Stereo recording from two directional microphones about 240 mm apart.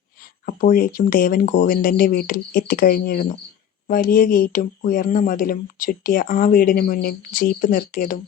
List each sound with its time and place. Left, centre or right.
0.4 s speech: left